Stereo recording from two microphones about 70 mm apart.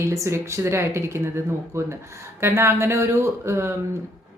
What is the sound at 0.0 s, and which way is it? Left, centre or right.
Speech, right.